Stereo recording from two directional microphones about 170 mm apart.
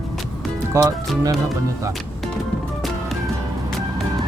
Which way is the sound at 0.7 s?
20° right (ahead or behind).